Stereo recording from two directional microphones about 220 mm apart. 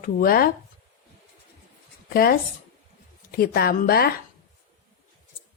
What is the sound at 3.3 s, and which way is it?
Speech, 45° left (ahead or behind).